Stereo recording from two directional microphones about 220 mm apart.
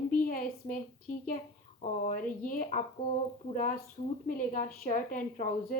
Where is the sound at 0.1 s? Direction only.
40° left (ahead or behind).